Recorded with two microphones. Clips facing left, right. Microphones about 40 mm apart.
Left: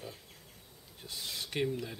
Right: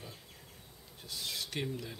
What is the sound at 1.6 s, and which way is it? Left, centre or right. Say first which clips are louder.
Speech: left 7 dB; centre.